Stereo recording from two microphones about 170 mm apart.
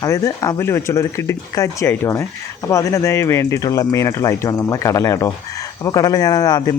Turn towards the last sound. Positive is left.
turn(degrees=20)  # may be behind; listen again after turning